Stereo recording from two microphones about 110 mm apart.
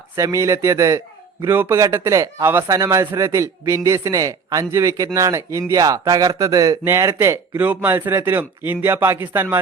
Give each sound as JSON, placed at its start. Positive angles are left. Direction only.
{"t": 0.2, "sound": "speech", "side_deg": -30}
{"t": 7.6, "sound": "speech", "side_deg": -15}